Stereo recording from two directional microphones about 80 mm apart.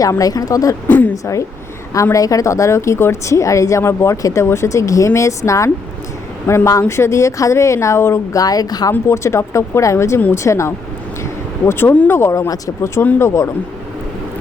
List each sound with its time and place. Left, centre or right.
0.0 s speech: left
0.9 s a woman's voice: left
1.1 s speech: left
8.4 s speech: left
8.9 s speech: left